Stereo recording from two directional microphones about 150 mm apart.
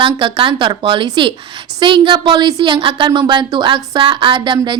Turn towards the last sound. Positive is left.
turn(degrees=-30)  # may be behind; listen again after turning